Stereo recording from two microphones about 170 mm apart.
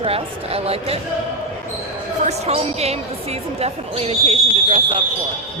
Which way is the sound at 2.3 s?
40° right (ahead or behind).